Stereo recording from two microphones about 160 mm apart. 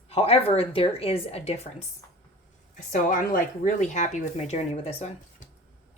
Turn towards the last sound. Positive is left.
turn(degrees=40)  # may be behind; listen again after turning